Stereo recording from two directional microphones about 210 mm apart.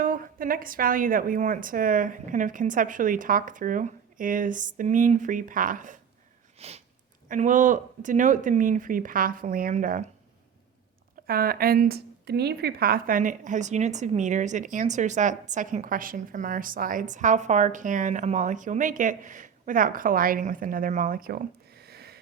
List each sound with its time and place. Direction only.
0.0 s a woman's voice: 40° right (ahead or behind)
6.6 s sniff: 30° right (ahead or behind)
7.3 s a woman's voice: 40° right (ahead or behind)
11.3 s a woman's voice: 45° right (ahead or behind)